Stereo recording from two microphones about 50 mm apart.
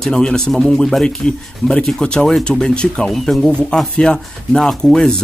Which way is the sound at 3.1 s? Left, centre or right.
Centre.